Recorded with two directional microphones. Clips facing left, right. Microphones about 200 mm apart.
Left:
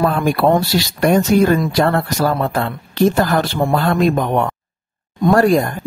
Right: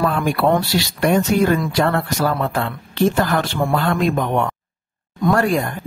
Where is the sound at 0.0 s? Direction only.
40° left (ahead or behind).